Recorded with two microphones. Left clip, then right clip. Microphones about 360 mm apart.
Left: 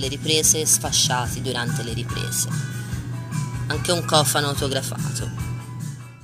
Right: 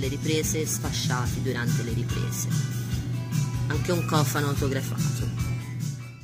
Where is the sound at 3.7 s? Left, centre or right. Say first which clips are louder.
Left 6 dB; centre.